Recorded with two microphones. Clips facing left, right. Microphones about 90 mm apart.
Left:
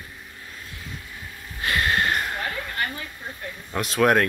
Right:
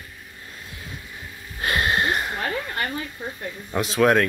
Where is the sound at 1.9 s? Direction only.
10° right (ahead or behind).